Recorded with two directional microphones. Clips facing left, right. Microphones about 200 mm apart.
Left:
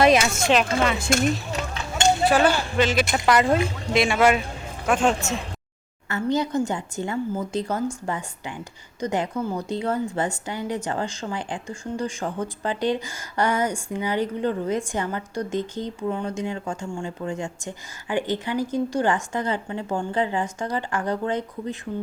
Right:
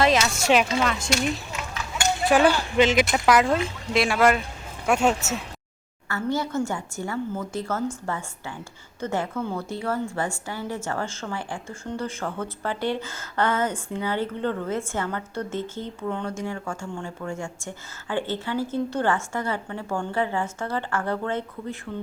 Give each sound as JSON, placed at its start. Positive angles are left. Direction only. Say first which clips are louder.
{"t": 0.0, "sound": "speech", "louder": "left 3 dB", "side_deg": 15}
{"t": 0.4, "sound": "speech", "louder": "right 4 dB", "side_deg": -10}
{"t": 0.9, "sound": "speech", "louder": "left 4 dB", "side_deg": 55}
{"t": 2.3, "sound": "speech", "louder": "right 1 dB", "side_deg": -15}
{"t": 3.1, "sound": "speech", "louder": "even", "side_deg": -5}
{"t": 6.1, "sound": "a woman's voice", "louder": "left 3 dB", "side_deg": 20}